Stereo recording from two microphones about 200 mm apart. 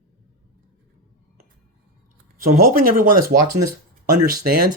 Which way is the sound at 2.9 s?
45° right (ahead or behind).